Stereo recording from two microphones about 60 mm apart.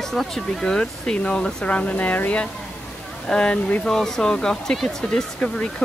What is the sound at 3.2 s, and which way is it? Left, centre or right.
Speech, centre.